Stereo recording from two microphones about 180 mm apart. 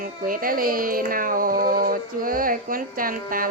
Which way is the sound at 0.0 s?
50° right (ahead or behind).